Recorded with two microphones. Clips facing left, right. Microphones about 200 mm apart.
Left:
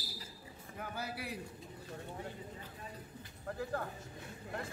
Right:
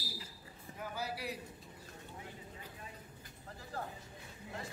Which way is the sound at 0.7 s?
55° left (ahead or behind).